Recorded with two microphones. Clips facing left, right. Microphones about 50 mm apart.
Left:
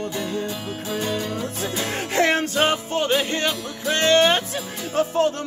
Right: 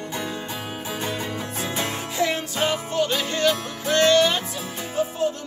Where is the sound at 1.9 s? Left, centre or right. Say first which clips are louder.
Left 7 dB; left.